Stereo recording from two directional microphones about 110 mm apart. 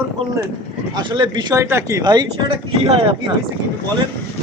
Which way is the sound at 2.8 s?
60° right (ahead or behind).